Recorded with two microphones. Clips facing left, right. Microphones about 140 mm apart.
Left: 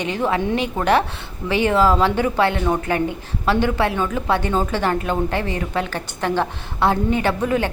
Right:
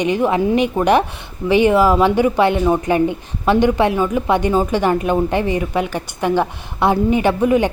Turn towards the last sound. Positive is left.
turn(degrees=-15)  # may be behind; listen again after turning